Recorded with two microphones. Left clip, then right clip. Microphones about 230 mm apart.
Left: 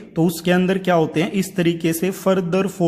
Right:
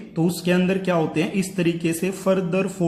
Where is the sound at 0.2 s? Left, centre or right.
Left.